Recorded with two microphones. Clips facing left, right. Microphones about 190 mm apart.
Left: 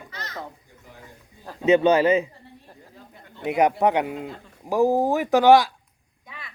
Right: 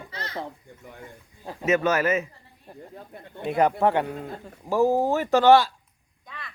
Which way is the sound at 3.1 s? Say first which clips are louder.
Right 6 dB; 60° right (ahead or behind).